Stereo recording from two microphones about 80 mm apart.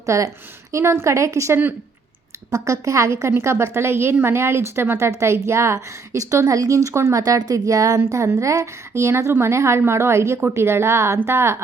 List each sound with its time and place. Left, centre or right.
0.0 s a woman's voice: right
7.2 s a woman's voice: right